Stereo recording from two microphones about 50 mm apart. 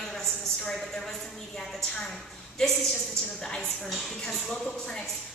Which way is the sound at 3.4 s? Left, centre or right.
Centre.